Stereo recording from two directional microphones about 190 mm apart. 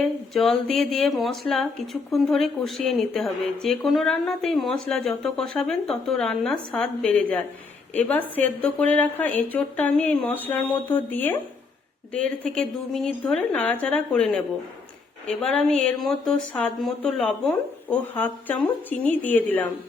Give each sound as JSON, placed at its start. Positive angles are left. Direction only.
{"t": 0.0, "sound": "speech", "side_deg": 0}